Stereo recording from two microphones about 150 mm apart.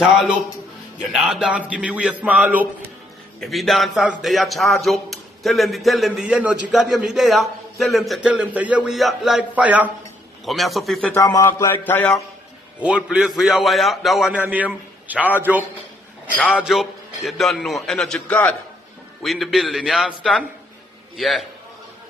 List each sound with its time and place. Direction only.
0.0 s a man's voice: 5° right (ahead or behind)
3.3 s a man's voice: centre (ahead or behind)
11.1 s a sound: 20° left (ahead or behind)
12.8 s a man's voice: 5° right (ahead or behind)
16.6 s a man's voice: centre (ahead or behind)